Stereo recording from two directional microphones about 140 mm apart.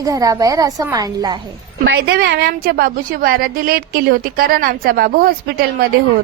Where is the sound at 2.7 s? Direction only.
90° right.